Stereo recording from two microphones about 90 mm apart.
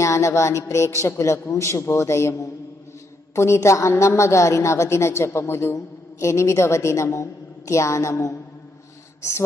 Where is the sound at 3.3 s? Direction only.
30° left (ahead or behind).